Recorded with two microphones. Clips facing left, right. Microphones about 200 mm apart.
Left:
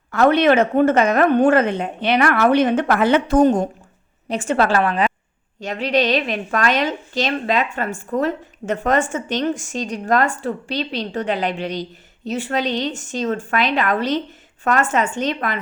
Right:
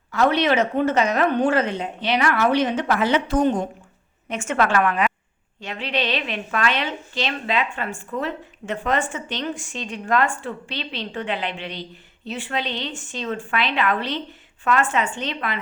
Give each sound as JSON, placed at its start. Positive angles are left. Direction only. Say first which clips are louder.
{"t": 0.1, "sound": "a woman's voice", "louder": "left 5 dB", "side_deg": 55}